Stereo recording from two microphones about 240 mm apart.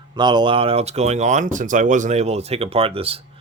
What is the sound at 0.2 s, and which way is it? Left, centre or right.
Speech, centre.